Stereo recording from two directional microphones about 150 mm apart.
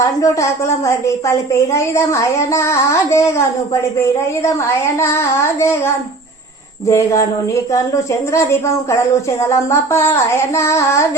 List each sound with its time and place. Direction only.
0.0 s a woman's voice: 20° left (ahead or behind)